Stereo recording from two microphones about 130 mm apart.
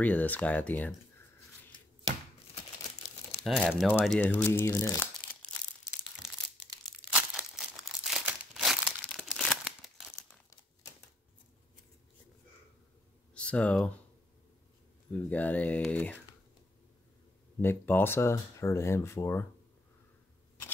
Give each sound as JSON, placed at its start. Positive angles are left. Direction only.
{"t": 0.0, "sound": "speech", "side_deg": 10}
{"t": 3.4, "sound": "speech", "side_deg": 0}
{"t": 7.2, "sound": "crumpling", "side_deg": -5}
{"t": 9.0, "sound": "a sound", "side_deg": 0}
{"t": 13.3, "sound": "speech", "side_deg": 10}
{"t": 15.2, "sound": "speech", "side_deg": 10}
{"t": 17.6, "sound": "speech", "side_deg": 15}